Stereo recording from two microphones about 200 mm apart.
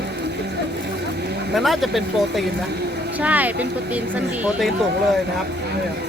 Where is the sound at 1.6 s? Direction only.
Centre (ahead or behind).